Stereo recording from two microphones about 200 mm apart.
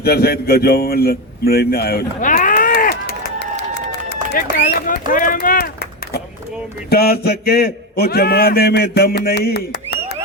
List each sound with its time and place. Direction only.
0.0 s a man's voice: 50° left (ahead or behind)
4.5 s a man's voice: 45° left (ahead or behind)
6.9 s a man's voice: 50° left (ahead or behind)